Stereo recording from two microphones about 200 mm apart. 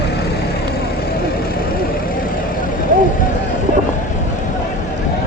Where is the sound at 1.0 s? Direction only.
50° left (ahead or behind).